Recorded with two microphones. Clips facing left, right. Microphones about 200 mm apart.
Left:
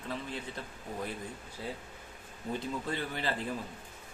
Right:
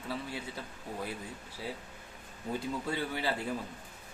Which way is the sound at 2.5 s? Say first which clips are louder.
Right 1 dB; 10° right (ahead or behind).